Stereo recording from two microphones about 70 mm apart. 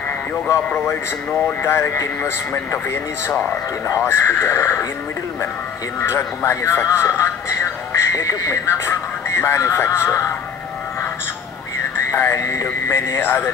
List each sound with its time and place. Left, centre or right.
1.6 s speech: left
5.9 s speech: left
12.1 s music: left
12.8 s speech: left